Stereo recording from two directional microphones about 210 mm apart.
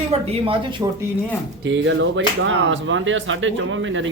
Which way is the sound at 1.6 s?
60° right (ahead or behind).